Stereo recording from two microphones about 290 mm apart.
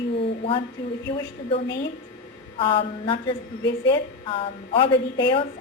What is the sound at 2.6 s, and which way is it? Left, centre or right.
A woman's voice, centre.